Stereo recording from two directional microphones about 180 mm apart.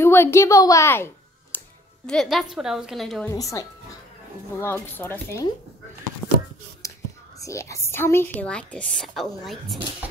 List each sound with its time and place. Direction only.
0.0 s speech: 15° left (ahead or behind)
2.0 s a woman's voice: centre (ahead or behind)
3.3 s a woman's voice: 20° left (ahead or behind)
6.2 s a sound: 5° left (ahead or behind)
6.8 s whispering: 15° left (ahead or behind)
7.3 s a woman's voice: 15° left (ahead or behind); by 10.0 s centre (ahead or behind)